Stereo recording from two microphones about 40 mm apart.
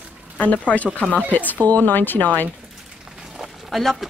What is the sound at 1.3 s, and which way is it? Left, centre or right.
Speech, left.